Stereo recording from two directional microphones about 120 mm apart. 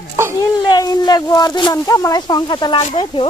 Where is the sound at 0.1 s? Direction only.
20° right (ahead or behind).